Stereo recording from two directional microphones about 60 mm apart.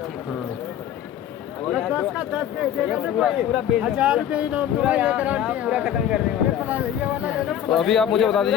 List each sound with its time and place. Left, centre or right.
2.1 s speech: centre
6.7 s speech: right
7.5 s a man's voice: centre